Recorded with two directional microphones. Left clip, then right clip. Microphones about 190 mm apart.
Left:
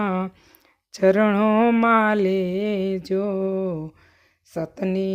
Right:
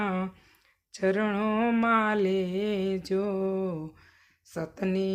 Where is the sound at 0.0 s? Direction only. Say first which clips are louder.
Left 6 dB; 45° left (ahead or behind).